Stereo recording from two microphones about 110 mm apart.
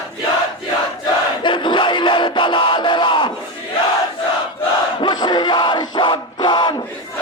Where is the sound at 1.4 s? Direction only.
45° left (ahead or behind).